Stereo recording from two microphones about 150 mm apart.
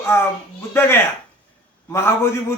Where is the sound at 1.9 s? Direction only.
15° left (ahead or behind).